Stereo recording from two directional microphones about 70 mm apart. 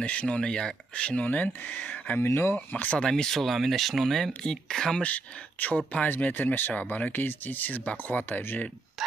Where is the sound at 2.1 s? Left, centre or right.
Left.